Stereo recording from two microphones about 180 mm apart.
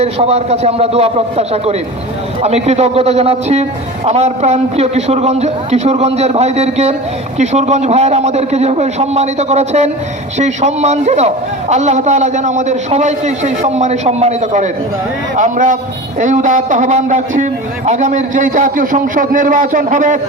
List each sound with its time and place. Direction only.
0.0 s a man's voice: 35° right (ahead or behind)